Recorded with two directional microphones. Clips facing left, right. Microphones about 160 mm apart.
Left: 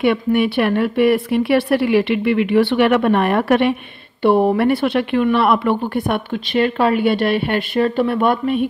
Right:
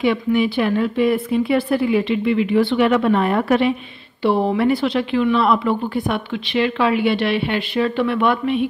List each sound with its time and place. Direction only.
0.0 s speech: 60° left (ahead or behind); by 8.6 s 45° left (ahead or behind)